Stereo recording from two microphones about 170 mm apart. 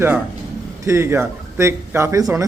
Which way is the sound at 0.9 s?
15° right (ahead or behind).